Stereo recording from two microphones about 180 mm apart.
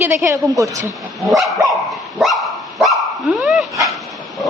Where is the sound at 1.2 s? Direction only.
Centre (ahead or behind).